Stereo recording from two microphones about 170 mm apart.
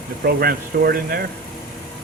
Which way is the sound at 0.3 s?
65° right (ahead or behind).